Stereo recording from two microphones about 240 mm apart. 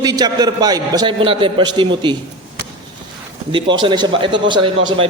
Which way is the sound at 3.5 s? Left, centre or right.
Centre.